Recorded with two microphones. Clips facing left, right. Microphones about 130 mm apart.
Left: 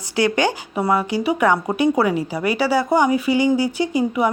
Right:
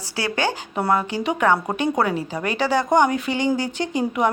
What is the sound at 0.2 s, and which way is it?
Speech, 15° left (ahead or behind).